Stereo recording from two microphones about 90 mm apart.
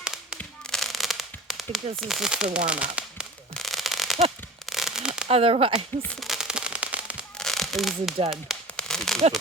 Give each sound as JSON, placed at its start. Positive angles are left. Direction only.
{"t": 0.0, "sound": "firecracker", "side_deg": -5}
{"t": 3.5, "sound": "fireworks", "side_deg": 0}
{"t": 4.7, "sound": "a sound", "side_deg": -5}
{"t": 5.3, "sound": "speech", "side_deg": -90}
{"t": 6.1, "sound": "fireworks", "side_deg": -5}
{"t": 7.3, "sound": "a sound", "side_deg": 5}